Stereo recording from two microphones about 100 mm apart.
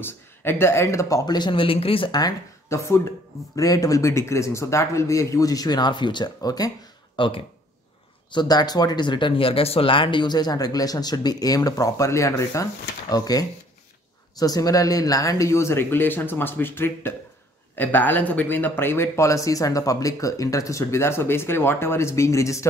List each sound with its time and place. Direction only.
0.0 s speech: 25° left (ahead or behind); by 2.0 s 65° left (ahead or behind)
2.0 s speech: 40° left (ahead or behind)
2.7 s speech: 30° left (ahead or behind)
7.2 s speech: 60° left (ahead or behind)
8.3 s speech: 45° left (ahead or behind); by 22.7 s 30° left (ahead or behind)